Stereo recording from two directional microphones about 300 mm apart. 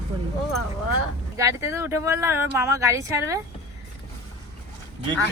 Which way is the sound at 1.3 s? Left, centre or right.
Centre.